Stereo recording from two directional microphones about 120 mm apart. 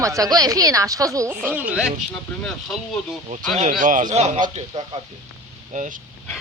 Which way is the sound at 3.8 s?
90° right.